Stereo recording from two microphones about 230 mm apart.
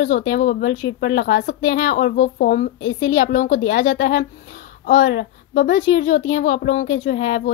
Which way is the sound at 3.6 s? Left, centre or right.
Left.